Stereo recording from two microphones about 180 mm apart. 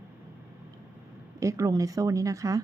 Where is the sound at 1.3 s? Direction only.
20° right (ahead or behind).